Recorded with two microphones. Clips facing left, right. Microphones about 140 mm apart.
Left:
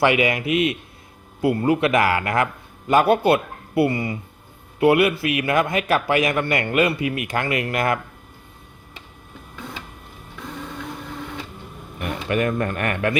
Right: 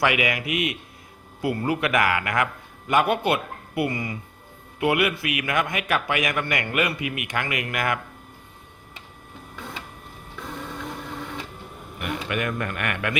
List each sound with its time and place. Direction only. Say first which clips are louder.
0.0 s a man's voice: left 5 dB; 30° left (ahead or behind)
11.9 s a man's voice: left 5 dB; 35° left (ahead or behind)